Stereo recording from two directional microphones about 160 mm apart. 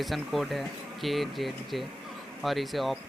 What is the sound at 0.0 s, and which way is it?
Speech, centre (ahead or behind).